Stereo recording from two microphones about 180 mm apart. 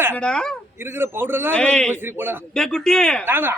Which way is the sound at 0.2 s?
5° left (ahead or behind).